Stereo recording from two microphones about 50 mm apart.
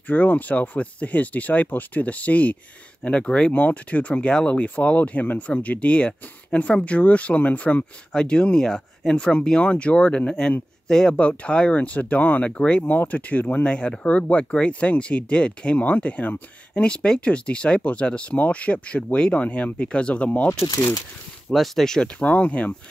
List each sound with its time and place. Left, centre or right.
0.0 s speech: left
3.0 s speech: centre
3.5 s speech: left
8.1 s speech: centre; by 12.4 s left
12.4 s speech: left
12.9 s speech: left
13.7 s speech: left
21.5 s speech: centre
22.2 s speech: left